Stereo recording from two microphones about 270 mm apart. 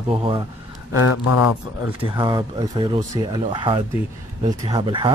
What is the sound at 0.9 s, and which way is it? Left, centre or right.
Speech, left.